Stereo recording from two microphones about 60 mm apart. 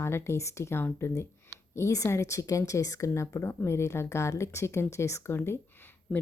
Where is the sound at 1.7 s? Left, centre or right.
Left.